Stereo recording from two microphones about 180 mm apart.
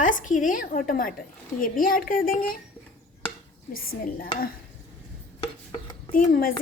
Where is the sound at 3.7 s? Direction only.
55° left (ahead or behind).